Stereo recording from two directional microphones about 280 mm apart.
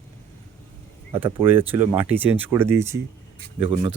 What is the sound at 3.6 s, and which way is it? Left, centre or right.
Speech, centre.